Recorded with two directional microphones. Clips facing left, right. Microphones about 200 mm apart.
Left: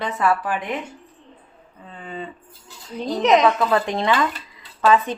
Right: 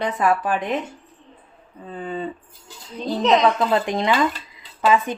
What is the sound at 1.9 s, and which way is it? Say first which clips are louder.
Speech: right 5 dB; 40° right (ahead or behind).